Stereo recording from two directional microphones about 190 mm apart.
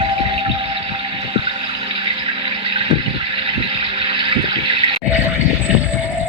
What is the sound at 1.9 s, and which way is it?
Water, 30° right (ahead or behind).